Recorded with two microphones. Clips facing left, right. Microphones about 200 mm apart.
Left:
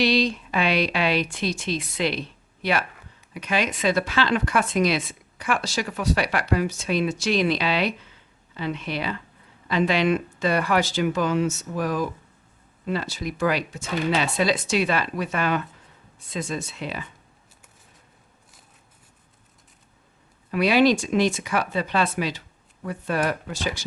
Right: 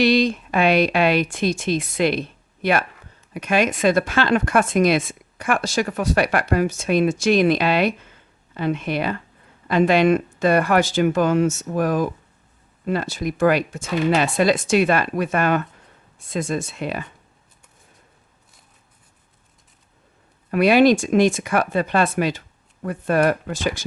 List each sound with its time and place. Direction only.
0.0 s speech: 50° right (ahead or behind)
20.5 s speech: 50° right (ahead or behind)